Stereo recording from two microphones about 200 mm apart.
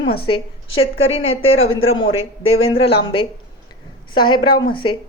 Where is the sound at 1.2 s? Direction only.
90° left.